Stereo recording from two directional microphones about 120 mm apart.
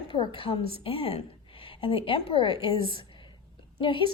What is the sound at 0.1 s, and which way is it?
A woman's voice, 45° left (ahead or behind).